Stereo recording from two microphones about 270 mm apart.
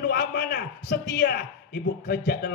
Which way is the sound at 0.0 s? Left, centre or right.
Left.